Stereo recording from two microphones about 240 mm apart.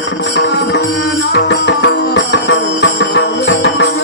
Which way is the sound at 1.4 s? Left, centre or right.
Left.